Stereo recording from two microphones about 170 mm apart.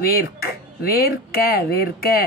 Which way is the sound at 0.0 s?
65° left (ahead or behind).